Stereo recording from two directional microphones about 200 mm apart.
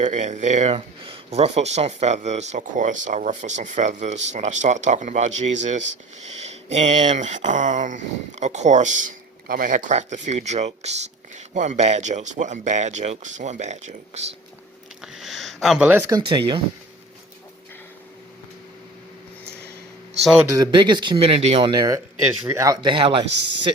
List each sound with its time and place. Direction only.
0.0 s speech: 35° right (ahead or behind)
15.0 s speech: centre (ahead or behind); by 16.4 s 20° right (ahead or behind)
20.5 s speech: 20° right (ahead or behind)